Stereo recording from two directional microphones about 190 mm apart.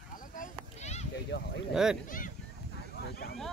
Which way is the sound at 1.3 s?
55° left (ahead or behind).